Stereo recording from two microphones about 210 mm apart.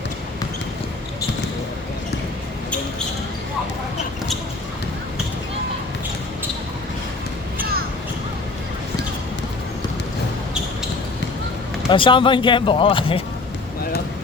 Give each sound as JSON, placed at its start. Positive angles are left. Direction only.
{"t": 11.9, "sound": "speech", "side_deg": 25}